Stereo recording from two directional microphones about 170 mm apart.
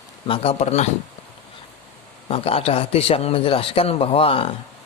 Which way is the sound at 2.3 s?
35° left (ahead or behind).